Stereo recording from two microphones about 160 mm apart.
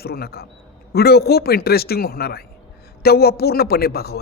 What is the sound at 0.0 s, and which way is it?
A man's voice, 75° left (ahead or behind).